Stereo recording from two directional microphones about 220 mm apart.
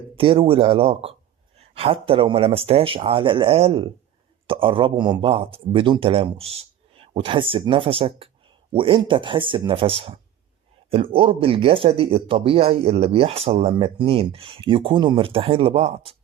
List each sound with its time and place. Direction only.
0.2 s speech: 25° right (ahead or behind)